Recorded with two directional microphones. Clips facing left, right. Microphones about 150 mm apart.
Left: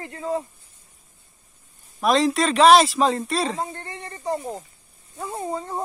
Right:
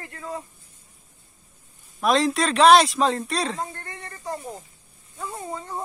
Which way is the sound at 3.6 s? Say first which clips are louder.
Left 3 dB; 25° left (ahead or behind).